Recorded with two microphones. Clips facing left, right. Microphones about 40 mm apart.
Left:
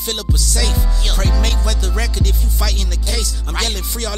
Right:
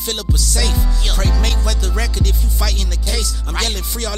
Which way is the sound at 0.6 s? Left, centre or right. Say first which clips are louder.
Even; centre.